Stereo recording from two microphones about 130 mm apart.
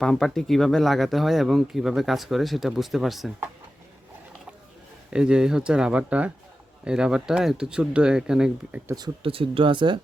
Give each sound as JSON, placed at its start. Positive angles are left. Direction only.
{"t": 0.0, "sound": "speech", "side_deg": 5}
{"t": 5.1, "sound": "speech", "side_deg": -5}
{"t": 9.2, "sound": "speech", "side_deg": -45}